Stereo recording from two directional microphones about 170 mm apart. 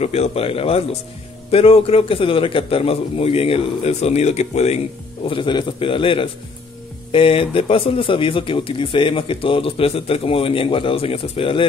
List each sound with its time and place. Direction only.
0.0 s speech: 35° left (ahead or behind)
5.2 s speech: 30° left (ahead or behind)